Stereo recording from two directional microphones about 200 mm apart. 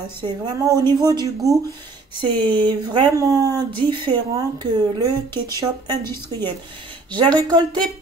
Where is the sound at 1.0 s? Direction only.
20° right (ahead or behind).